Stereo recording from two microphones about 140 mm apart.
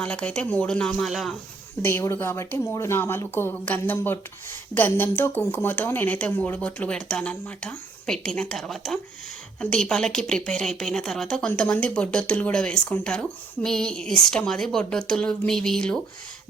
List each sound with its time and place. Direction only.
0.0 s a woman's voice: 10° left (ahead or behind)
1.8 s a woman's voice: 15° left (ahead or behind)